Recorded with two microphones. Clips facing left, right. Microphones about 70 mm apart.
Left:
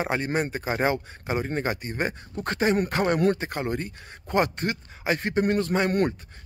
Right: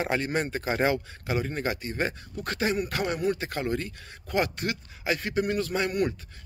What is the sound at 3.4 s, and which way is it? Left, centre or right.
Speech, left.